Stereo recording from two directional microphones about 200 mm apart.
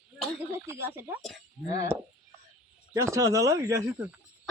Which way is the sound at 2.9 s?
15° right (ahead or behind).